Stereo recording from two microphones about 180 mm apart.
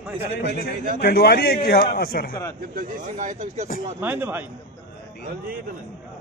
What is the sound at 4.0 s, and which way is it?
Speech, 10° right (ahead or behind).